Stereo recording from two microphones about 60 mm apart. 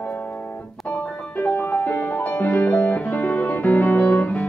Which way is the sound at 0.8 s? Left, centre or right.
Left.